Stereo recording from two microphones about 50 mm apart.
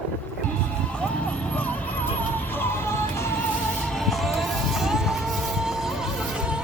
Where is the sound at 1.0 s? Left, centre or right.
Left.